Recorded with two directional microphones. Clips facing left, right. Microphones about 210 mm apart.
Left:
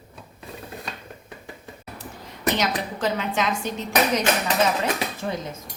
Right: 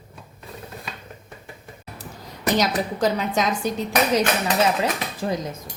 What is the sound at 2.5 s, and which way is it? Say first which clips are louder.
A woman's voice: right 6 dB; 40° right (ahead or behind).